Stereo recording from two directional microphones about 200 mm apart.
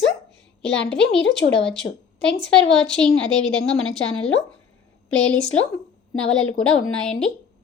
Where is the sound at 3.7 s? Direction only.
5° left (ahead or behind).